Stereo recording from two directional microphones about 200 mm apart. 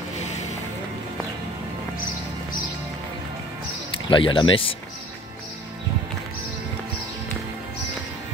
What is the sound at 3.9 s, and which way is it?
Speech, 25° left (ahead or behind).